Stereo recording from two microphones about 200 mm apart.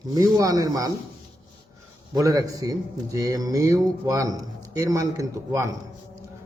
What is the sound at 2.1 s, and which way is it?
A man's voice, 15° right (ahead or behind).